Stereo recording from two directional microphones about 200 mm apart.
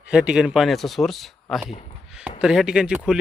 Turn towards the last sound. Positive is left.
turn(degrees=-5)  # may be behind; listen again after turning